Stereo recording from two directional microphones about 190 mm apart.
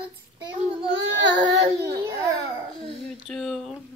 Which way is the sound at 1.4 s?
15° right (ahead or behind).